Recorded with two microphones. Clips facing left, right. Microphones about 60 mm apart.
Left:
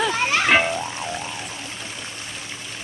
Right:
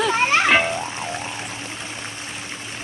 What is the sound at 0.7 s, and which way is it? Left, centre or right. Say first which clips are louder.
Music: even; right.